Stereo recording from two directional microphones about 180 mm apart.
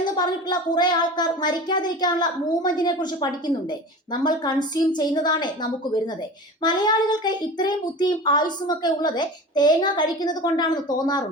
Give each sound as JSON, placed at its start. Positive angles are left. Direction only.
{"t": 0.0, "sound": "a child's voice", "side_deg": 25}
{"t": 6.6, "sound": "a child's voice", "side_deg": 25}